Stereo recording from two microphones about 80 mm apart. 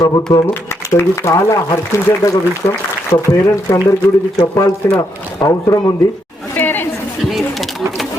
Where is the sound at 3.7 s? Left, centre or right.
Left.